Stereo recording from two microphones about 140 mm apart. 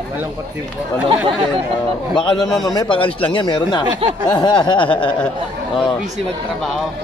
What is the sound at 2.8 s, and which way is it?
A man's voice, 40° left (ahead or behind).